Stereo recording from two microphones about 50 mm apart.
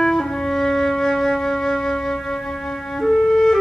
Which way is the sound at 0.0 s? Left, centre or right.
Centre.